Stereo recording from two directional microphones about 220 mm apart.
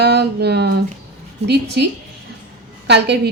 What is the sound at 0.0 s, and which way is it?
A woman's voice, 50° right (ahead or behind).